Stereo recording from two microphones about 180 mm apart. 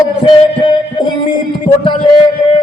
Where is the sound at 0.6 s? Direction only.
25° left (ahead or behind).